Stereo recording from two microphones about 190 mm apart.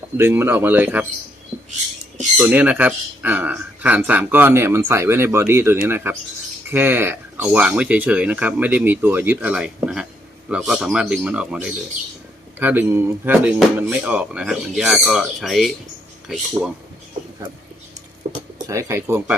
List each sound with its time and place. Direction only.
0.2 s speech: 15° right (ahead or behind)
2.4 s a man's voice: 10° right (ahead or behind)
18.3 s a sound: 40° right (ahead or behind)
18.7 s speech: 15° right (ahead or behind)